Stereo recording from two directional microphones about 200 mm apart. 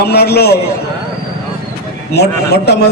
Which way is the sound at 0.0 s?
55° left (ahead or behind).